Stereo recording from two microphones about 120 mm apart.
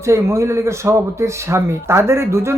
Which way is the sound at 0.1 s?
25° right (ahead or behind).